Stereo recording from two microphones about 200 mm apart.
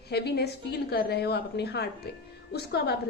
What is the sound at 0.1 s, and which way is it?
A woman's voice, 55° left (ahead or behind).